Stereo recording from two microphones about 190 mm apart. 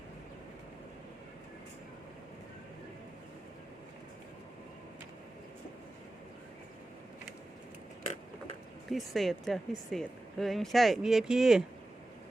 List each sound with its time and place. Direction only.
8.9 s speech: centre (ahead or behind)